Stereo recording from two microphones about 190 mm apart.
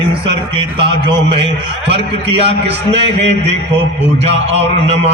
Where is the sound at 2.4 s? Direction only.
30° right (ahead or behind).